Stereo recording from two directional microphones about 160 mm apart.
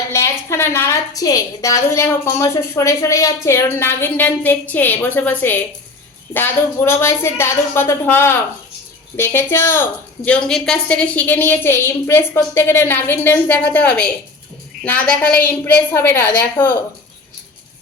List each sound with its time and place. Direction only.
0.1 s a woman's voice: 15° left (ahead or behind)